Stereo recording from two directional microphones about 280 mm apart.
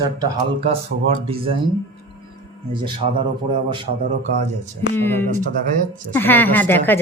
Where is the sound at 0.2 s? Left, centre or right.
Centre.